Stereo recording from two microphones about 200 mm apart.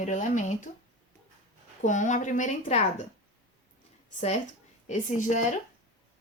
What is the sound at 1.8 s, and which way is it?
A woman's voice, 40° left (ahead or behind).